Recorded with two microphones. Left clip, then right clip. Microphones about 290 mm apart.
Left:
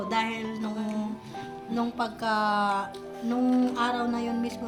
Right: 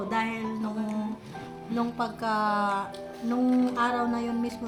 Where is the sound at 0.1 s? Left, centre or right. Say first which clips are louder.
Left 1 dB; centre.